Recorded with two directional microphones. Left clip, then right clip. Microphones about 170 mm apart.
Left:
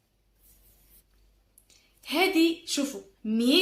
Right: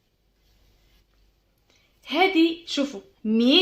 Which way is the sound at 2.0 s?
35° right (ahead or behind).